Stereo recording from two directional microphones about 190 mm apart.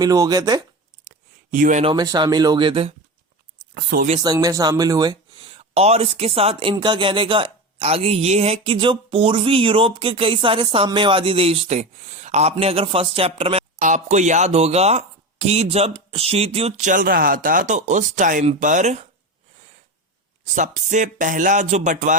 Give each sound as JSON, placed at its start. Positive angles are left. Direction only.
{"t": 0.0, "sound": "speech", "side_deg": -20}
{"t": 1.0, "sound": "a sound", "side_deg": -45}
{"t": 1.8, "sound": "speech", "side_deg": -25}
{"t": 3.8, "sound": "speech", "side_deg": -55}
{"t": 4.2, "sound": "speech", "side_deg": -20}
{"t": 20.4, "sound": "speech", "side_deg": -40}